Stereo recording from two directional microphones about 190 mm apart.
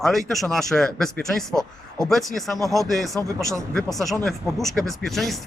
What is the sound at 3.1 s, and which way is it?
Speech, 15° right (ahead or behind).